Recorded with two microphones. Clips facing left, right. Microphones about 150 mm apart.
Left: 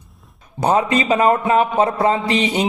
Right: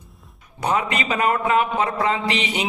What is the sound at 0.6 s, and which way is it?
A man's voice, 30° left (ahead or behind).